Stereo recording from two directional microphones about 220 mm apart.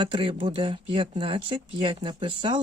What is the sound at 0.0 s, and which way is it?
Speech, 25° right (ahead or behind).